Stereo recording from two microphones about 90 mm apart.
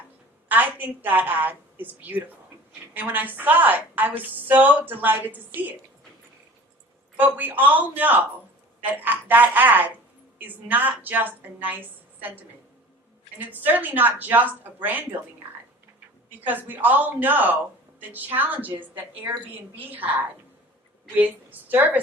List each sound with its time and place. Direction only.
0.4 s a woman's voice: 20° right (ahead or behind)
7.2 s a woman's voice: 20° right (ahead or behind)
16.6 s a woman's voice: 20° right (ahead or behind)
20.0 s a woman's voice: 20° right (ahead or behind)